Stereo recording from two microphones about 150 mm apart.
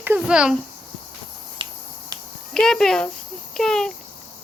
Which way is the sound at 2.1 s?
25° right (ahead or behind).